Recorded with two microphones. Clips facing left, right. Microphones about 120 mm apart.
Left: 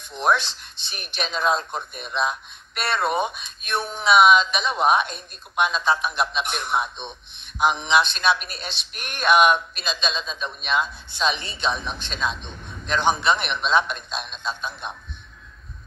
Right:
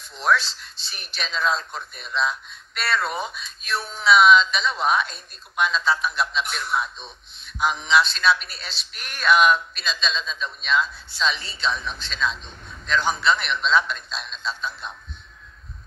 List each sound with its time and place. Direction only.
0.1 s a man's voice: 20° left (ahead or behind)